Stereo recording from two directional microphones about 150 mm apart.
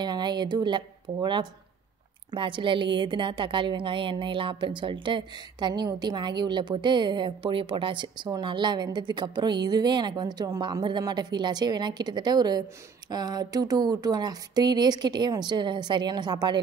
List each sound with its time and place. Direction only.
0.0 s a woman's voice: 30° right (ahead or behind)